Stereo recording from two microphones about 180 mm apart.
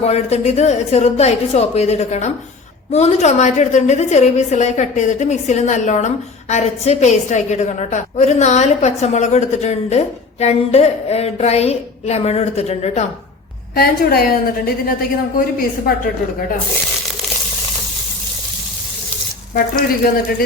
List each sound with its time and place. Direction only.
0.0 s a woman's voice: 35° left (ahead or behind)
13.7 s a woman's voice: 60° left (ahead or behind)